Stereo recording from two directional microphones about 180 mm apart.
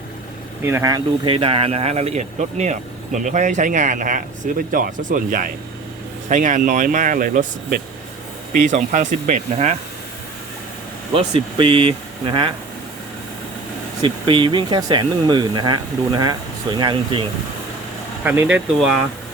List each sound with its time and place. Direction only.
0.6 s speech: 15° right (ahead or behind); by 9.7 s 40° right (ahead or behind)
11.1 s speech: 30° right (ahead or behind)
14.0 s speech: 25° right (ahead or behind)
18.2 s speech: 10° right (ahead or behind)